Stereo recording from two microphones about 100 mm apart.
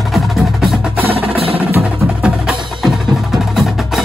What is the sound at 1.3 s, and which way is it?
Music, 70° right (ahead or behind).